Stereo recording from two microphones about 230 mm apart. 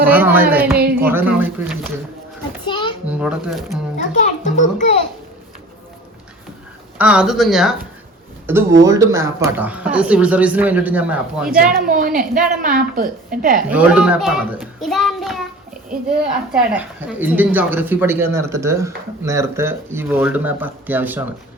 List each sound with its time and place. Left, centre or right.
0.0 s speech: centre
2.6 s children playing: centre
3.1 s a child's voice: centre
3.9 s a child's voice: left
7.0 s a child's voice: centre
8.4 s speech: centre
11.9 s a woman's voice: right
13.7 s a child's voice: centre
16.5 s speech: centre